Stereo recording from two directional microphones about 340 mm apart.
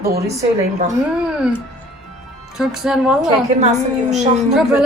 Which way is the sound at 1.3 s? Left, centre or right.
Centre.